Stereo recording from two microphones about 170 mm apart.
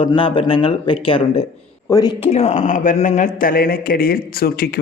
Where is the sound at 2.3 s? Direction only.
40° left (ahead or behind); by 4.8 s 65° left (ahead or behind).